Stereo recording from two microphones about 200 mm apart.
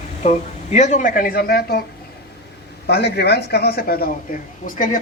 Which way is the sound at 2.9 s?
55° left (ahead or behind).